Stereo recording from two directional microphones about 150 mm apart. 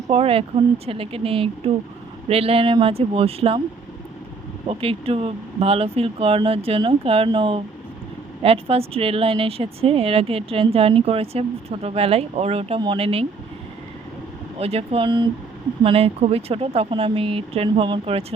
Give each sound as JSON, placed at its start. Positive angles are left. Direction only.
{"t": 0.1, "sound": "speech", "side_deg": -40}
{"t": 4.7, "sound": "speech", "side_deg": -40}
{"t": 14.6, "sound": "speech", "side_deg": -40}